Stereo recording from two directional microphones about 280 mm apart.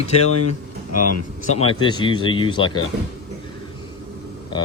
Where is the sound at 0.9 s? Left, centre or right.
Left.